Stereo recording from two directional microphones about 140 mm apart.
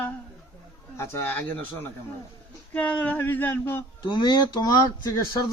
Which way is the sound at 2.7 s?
10° left (ahead or behind).